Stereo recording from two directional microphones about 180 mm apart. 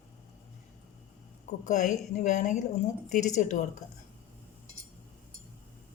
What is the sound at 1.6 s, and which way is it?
A woman's voice, 40° left (ahead or behind).